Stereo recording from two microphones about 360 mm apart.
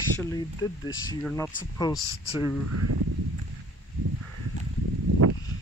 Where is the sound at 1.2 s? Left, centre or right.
Centre.